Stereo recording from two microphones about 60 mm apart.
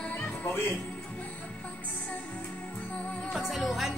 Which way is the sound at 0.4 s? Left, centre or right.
Left.